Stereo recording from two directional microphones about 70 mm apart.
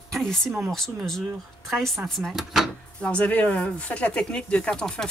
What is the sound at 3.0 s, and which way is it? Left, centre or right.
Speech, centre.